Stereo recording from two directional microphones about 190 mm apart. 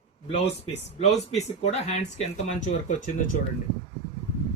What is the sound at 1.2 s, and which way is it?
Speech, 35° left (ahead or behind).